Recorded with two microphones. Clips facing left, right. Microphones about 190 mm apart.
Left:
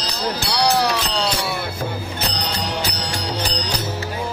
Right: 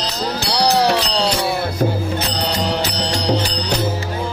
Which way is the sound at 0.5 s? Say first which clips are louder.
Right 4 dB; 30° right (ahead or behind).